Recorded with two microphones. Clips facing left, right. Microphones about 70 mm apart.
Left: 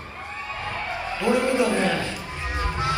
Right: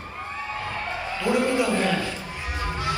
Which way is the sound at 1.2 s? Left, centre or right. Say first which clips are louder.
Left 2 dB; left.